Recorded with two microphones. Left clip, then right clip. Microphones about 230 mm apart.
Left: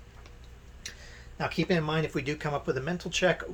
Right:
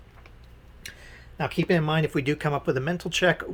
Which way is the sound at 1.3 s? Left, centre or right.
Right.